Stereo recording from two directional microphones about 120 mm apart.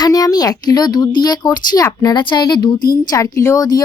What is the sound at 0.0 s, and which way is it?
Speech, 30° left (ahead or behind).